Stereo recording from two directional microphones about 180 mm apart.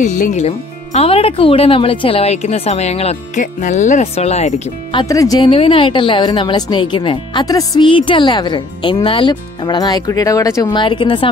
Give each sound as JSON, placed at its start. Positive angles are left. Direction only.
{"t": 0.0, "sound": "speech", "side_deg": 45}
{"t": 5.0, "sound": "a woman's voice", "side_deg": 20}